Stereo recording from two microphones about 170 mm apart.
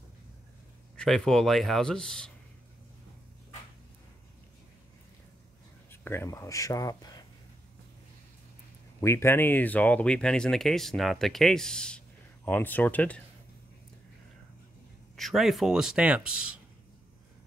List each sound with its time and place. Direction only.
0.9 s speech: 5° left (ahead or behind)
5.9 s speech: 15° left (ahead or behind)
9.0 s speech: 15° left (ahead or behind)
15.1 s speech: centre (ahead or behind)